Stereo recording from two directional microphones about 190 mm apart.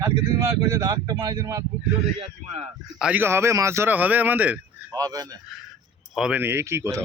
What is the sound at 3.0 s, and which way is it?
A man's voice, 10° right (ahead or behind).